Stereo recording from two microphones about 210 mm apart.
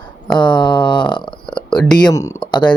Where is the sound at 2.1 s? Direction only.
15° left (ahead or behind).